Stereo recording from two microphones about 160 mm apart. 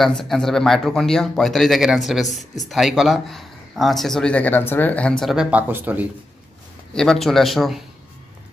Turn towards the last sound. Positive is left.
turn(degrees=0)  # may be behind; listen again after turning